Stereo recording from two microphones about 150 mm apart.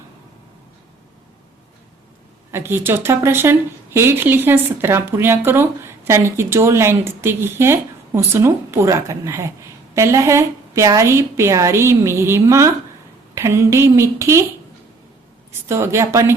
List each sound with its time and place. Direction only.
2.5 s speech: 15° right (ahead or behind)
15.7 s speech: 20° right (ahead or behind)